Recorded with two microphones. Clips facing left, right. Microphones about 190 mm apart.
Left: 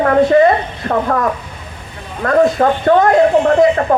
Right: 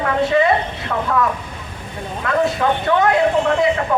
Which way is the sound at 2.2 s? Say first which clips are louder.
Left 6 dB; 45° left (ahead or behind).